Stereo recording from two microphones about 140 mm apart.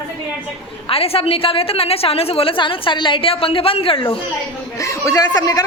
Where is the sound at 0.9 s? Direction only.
45° left (ahead or behind).